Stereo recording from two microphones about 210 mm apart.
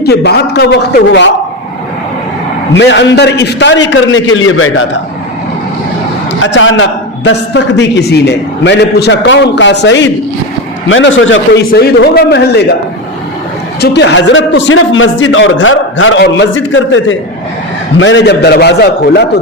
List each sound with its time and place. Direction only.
0.0 s a man's voice: 50° left (ahead or behind)
2.7 s a man's voice: 55° left (ahead or behind)
6.4 s a man's voice: 65° left (ahead or behind)
11.7 s a man's voice: 50° left (ahead or behind)
13.8 s a man's voice: 55° left (ahead or behind)